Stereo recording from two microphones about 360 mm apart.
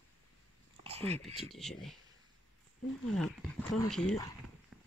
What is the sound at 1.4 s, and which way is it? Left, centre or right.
Speech, centre.